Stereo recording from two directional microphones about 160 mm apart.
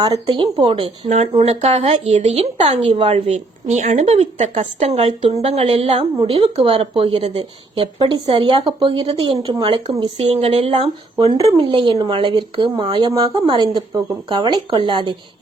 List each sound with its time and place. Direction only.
0.0 s speech: 30° right (ahead or behind)